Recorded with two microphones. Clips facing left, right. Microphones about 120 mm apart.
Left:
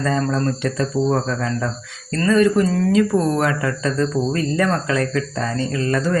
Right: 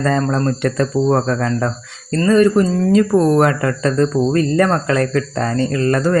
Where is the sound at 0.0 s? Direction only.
50° right (ahead or behind).